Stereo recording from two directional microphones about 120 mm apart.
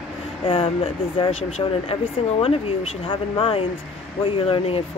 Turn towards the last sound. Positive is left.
turn(degrees=55)  # may be behind; listen again after turning